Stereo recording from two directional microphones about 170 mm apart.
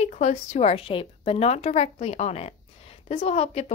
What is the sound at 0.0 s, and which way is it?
A woman's voice, 45° left (ahead or behind).